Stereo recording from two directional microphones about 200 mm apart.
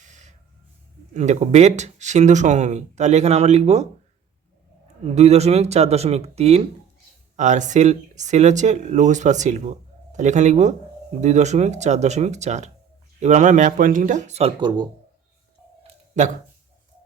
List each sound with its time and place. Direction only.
0.0 s snort: 35° right (ahead or behind)
1.1 s speech: 35° right (ahead or behind)
5.0 s speech: 30° right (ahead or behind)
15.8 s a sound: 35° right (ahead or behind)